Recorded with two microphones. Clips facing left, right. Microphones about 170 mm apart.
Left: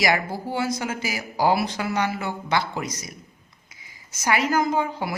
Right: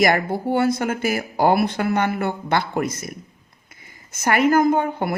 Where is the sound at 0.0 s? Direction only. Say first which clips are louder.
Right 5 dB; 55° right (ahead or behind).